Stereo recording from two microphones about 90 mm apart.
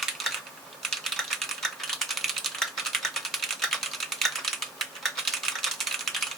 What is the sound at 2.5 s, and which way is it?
Typing, centre (ahead or behind).